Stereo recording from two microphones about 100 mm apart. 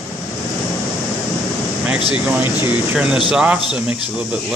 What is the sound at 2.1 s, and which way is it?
Speech, 15° right (ahead or behind).